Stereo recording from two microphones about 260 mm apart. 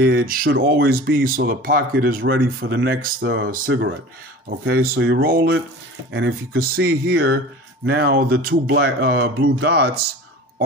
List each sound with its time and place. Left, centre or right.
0.0 s speech: right